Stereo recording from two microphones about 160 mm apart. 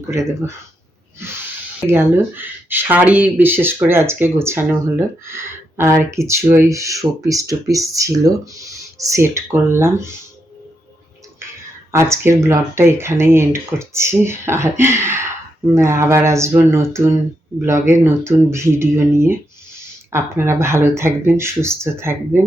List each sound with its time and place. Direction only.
0.1 s speech: 15° right (ahead or behind)
1.8 s speech: 15° right (ahead or behind)
11.9 s speech: 15° right (ahead or behind)